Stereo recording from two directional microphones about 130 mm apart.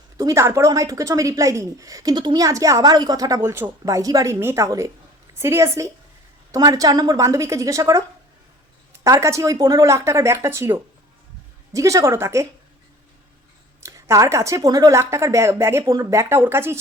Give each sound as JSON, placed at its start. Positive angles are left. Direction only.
{"t": 0.2, "sound": "a woman's voice", "side_deg": -25}
{"t": 9.0, "sound": "a woman's voice", "side_deg": -25}
{"t": 13.8, "sound": "a woman's voice", "side_deg": -25}